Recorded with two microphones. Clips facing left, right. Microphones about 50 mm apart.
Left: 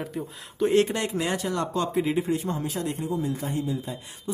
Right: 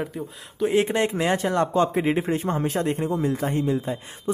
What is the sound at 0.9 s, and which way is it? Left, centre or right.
Speech, right.